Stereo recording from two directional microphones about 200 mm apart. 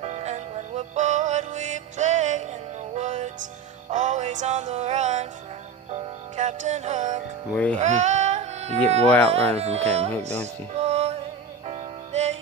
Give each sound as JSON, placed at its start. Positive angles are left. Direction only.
{"t": 0.0, "sound": "music", "side_deg": -35}
{"t": 9.0, "sound": "speech", "side_deg": 5}
{"t": 9.6, "sound": "speech", "side_deg": -30}
{"t": 10.4, "sound": "music", "side_deg": -35}